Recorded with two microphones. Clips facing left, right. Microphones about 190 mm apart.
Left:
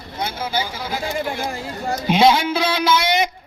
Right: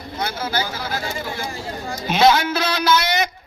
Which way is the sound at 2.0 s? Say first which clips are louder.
Left 1 dB; 15° left (ahead or behind).